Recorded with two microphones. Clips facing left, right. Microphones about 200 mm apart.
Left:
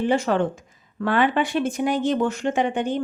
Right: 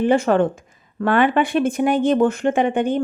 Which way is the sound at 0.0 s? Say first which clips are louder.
Right 5 dB; 55° right (ahead or behind).